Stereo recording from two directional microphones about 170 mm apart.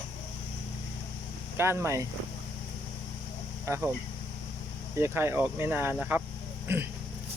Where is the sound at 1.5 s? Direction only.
15° right (ahead or behind).